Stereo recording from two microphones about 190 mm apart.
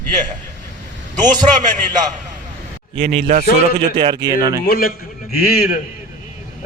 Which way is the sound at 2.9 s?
35° right (ahead or behind).